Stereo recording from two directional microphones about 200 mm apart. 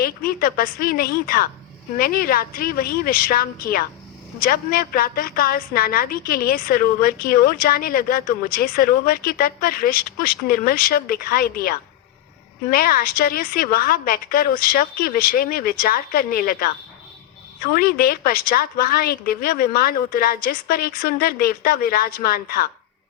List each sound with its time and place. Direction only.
0.0 s a woman's voice: 45° left (ahead or behind)